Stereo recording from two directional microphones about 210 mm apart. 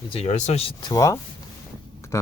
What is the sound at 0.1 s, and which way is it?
Speech, 30° left (ahead or behind).